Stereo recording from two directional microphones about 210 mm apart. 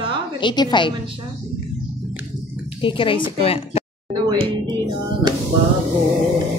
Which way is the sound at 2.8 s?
25° left (ahead or behind).